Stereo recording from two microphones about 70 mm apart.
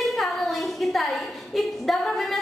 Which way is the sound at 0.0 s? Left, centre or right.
Centre.